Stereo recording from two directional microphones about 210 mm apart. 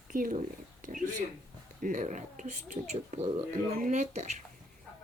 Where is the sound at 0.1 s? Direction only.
40° right (ahead or behind).